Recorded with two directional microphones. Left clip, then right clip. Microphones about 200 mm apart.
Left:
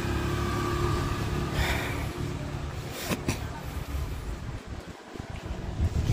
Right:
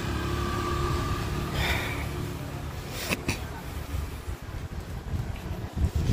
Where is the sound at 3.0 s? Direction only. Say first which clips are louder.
Right 2 dB; 15° left (ahead or behind).